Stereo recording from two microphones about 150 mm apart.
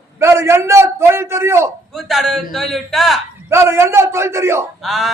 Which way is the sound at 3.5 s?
15° right (ahead or behind).